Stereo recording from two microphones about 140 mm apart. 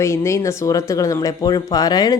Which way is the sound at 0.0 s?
20° left (ahead or behind).